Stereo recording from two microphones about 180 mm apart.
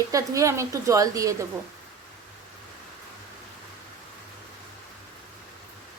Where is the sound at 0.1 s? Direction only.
20° right (ahead or behind).